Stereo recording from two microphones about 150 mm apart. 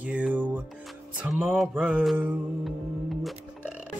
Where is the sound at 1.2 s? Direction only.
10° right (ahead or behind).